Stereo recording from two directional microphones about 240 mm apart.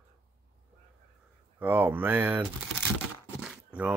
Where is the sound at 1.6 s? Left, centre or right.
Centre.